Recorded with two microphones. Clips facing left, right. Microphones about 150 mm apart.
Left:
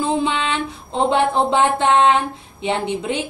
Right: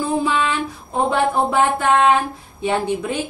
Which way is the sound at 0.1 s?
25° left (ahead or behind).